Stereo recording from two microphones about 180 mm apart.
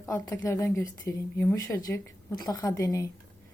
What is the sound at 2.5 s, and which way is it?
Stir, 20° left (ahead or behind).